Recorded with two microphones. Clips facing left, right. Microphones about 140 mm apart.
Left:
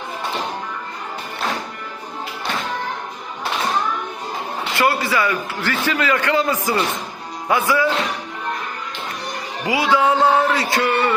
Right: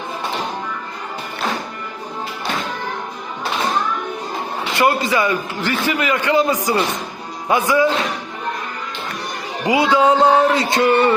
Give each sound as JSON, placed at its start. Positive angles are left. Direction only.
{"t": 4.8, "sound": "a man's voice", "side_deg": -20}
{"t": 9.6, "sound": "speech", "side_deg": -25}